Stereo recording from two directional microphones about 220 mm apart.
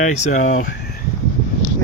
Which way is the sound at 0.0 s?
35° left (ahead or behind).